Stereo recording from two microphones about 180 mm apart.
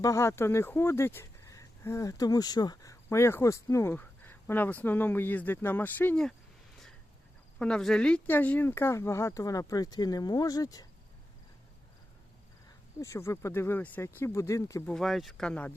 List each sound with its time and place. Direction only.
0.0 s speech: 15° left (ahead or behind)
7.6 s speech: 5° left (ahead or behind); by 10.8 s 20° left (ahead or behind)
13.0 s speech: 15° left (ahead or behind)
14.9 s speech: centre (ahead or behind)